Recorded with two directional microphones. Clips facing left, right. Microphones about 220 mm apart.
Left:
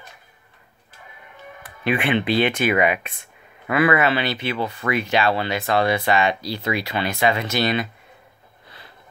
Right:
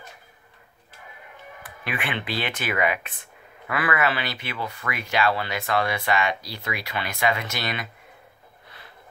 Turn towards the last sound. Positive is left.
turn(degrees=30)  # may be behind; listen again after turning